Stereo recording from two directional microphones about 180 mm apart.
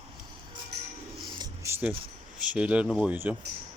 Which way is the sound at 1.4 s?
15° right (ahead or behind).